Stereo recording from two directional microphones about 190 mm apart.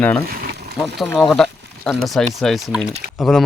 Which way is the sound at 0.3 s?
55° right (ahead or behind).